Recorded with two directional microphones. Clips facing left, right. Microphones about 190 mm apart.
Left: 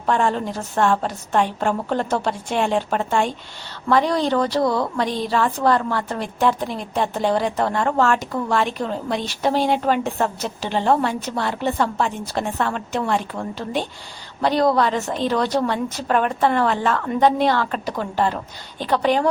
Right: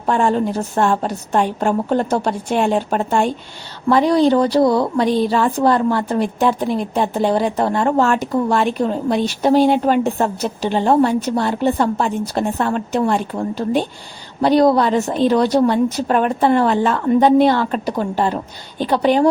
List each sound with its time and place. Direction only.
0.0 s a woman's voice: 35° right (ahead or behind)
7.5 s a woman's voice: 30° right (ahead or behind)
17.7 s a woman's voice: 35° right (ahead or behind)